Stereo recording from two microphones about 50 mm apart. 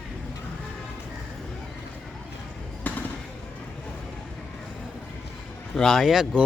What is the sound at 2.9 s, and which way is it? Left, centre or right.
Basketball bounce, left.